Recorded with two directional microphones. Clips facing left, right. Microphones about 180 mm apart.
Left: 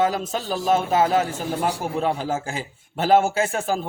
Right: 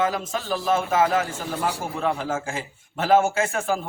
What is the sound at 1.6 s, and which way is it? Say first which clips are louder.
Speech: left 2 dB; 20° left (ahead or behind).